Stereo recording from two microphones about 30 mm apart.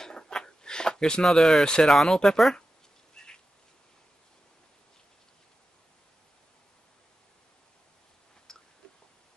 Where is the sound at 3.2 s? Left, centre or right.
Centre.